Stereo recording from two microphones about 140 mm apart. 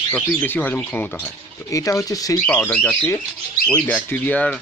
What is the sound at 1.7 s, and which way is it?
Speech, 25° left (ahead or behind).